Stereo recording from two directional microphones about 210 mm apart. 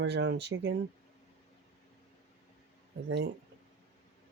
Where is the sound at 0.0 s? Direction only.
55° right (ahead or behind).